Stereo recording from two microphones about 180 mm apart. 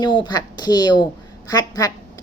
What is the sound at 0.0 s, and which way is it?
A woman's voice, 25° left (ahead or behind).